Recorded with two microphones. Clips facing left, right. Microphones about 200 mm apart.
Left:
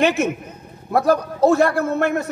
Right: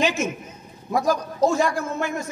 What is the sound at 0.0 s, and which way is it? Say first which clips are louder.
A man's voice: left 5 dB; 60° left (ahead or behind).